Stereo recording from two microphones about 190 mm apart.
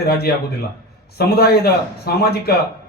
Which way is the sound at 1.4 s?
55° left (ahead or behind).